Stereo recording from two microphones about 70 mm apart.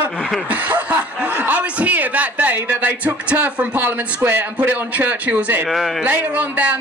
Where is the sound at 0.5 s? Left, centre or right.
Right.